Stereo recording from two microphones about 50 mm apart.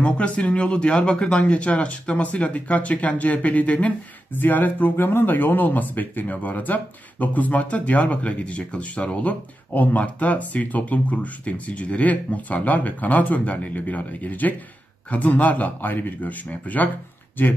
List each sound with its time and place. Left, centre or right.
0.0 s speech: left
4.4 s speech: left